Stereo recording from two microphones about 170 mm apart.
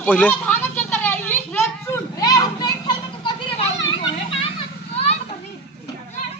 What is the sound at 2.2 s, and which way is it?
Children playing, 20° left (ahead or behind).